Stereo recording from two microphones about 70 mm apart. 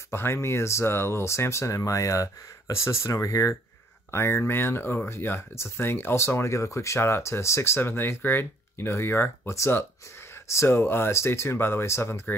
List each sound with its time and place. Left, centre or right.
0.1 s speech: left
4.1 s speech: left